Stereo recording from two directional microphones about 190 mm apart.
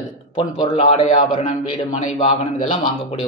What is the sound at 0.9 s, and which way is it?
A man's voice, 30° left (ahead or behind).